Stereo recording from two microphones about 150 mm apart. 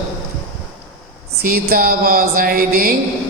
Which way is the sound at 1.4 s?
80° right.